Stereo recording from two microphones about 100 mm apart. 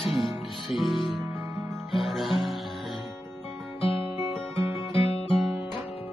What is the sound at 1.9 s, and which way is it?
Music, centre (ahead or behind).